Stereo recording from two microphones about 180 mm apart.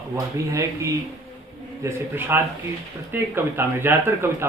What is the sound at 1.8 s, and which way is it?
Speech, 15° right (ahead or behind).